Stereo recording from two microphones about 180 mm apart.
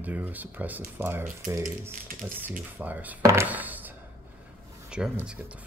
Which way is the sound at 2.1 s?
50° right (ahead or behind).